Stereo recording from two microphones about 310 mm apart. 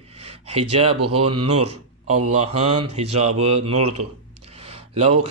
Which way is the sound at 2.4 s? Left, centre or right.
Centre.